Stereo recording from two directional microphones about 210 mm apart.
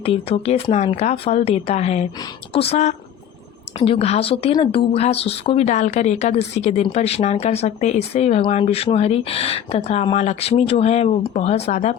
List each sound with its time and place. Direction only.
0.0 s speech: 30° left (ahead or behind)